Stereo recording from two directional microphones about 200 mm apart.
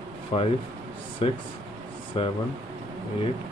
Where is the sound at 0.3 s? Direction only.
30° left (ahead or behind).